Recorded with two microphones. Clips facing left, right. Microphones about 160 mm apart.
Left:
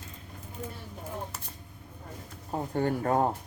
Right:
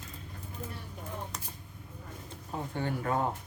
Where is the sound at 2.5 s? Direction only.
40° left (ahead or behind).